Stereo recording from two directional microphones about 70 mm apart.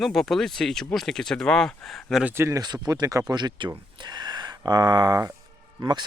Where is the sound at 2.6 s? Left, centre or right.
Right.